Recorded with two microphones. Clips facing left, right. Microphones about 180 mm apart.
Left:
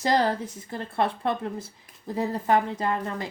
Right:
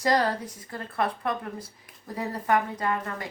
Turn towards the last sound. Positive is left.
turn(degrees=25)  # may be behind; listen again after turning